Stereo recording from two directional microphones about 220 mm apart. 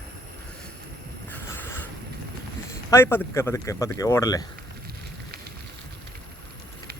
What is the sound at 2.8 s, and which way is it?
Speech, 10° left (ahead or behind).